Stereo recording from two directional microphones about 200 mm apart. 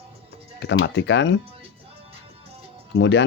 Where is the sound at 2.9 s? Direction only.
65° left (ahead or behind).